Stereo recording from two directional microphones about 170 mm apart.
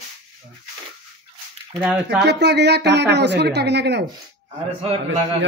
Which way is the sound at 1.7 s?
5° right (ahead or behind).